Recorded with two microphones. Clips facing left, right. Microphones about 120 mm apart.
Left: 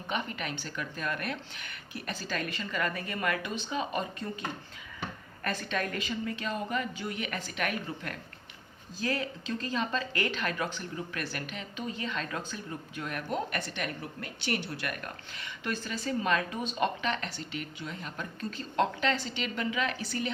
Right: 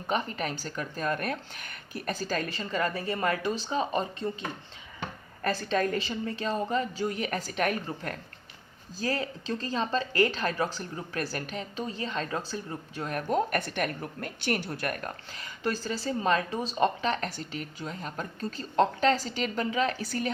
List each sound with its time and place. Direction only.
0.1 s a woman's voice: 35° right (ahead or behind)